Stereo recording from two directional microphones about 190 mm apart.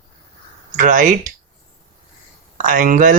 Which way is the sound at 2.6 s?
45° right (ahead or behind).